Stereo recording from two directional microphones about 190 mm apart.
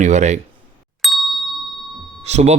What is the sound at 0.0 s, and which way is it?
Speech, 35° right (ahead or behind).